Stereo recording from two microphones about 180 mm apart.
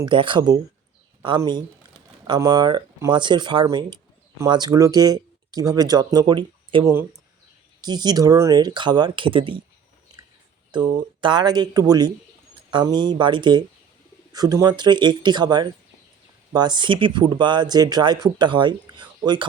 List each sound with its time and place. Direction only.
0.0 s speech: 25° right (ahead or behind)
2.2 s speech: 25° right (ahead or behind)
11.2 s speech: 25° right (ahead or behind)